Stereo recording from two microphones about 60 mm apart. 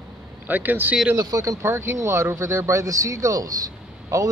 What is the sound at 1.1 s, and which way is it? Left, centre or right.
Speech, right.